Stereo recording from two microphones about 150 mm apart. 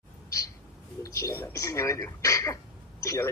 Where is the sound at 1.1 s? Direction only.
20° left (ahead or behind).